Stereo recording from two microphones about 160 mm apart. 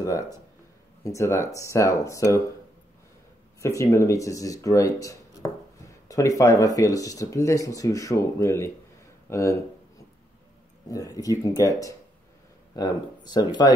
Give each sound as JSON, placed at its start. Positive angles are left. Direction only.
{"t": 0.0, "sound": "speech", "side_deg": 20}
{"t": 3.6, "sound": "speech", "side_deg": 20}
{"t": 10.9, "sound": "speech", "side_deg": 20}